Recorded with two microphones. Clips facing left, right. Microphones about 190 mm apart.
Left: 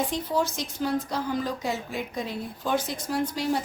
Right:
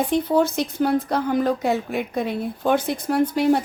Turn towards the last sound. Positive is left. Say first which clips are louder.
# right 8 dB
turn(degrees=-60)  # may be behind; listen again after turning